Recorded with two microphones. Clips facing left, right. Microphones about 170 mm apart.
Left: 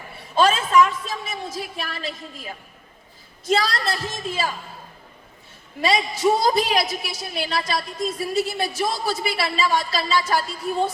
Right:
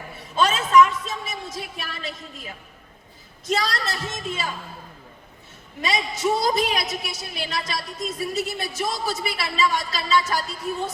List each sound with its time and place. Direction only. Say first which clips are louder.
0.3 s a woman's voice: even; 30° left (ahead or behind)
5.8 s a woman's voice: left 4 dB; 30° left (ahead or behind)